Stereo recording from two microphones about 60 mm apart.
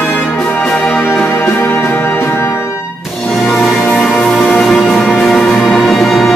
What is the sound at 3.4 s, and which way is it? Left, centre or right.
Music, centre.